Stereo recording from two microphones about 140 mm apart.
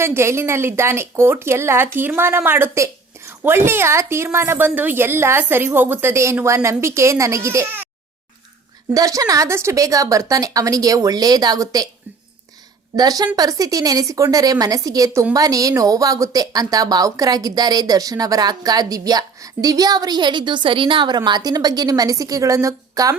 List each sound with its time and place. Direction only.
0.0 s speech: 20° right (ahead or behind)
8.9 s speech: 25° right (ahead or behind)
13.0 s speech: 30° right (ahead or behind)